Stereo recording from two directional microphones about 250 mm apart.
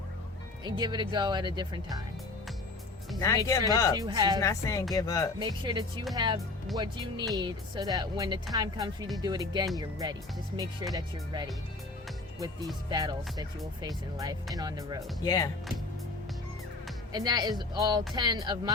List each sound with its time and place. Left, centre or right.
0.6 s speech: centre
3.2 s a woman's voice: centre
3.9 s speech: centre
4.4 s a woman's voice: centre
5.4 s speech: centre
12.9 s speech: centre
15.2 s a woman's voice: centre
17.1 s speech: centre